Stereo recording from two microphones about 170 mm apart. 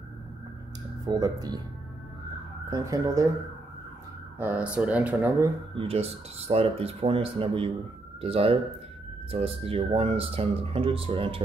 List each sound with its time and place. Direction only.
1.0 s speech: 20° right (ahead or behind)
2.7 s speech: 20° right (ahead or behind)
4.4 s speech: 10° right (ahead or behind)
5.8 s speech: 35° right (ahead or behind)